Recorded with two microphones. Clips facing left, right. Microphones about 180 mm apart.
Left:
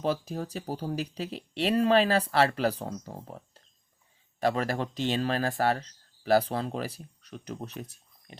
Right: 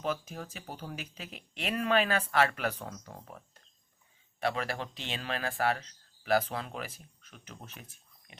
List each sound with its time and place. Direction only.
0.0 s speech: 35° left (ahead or behind)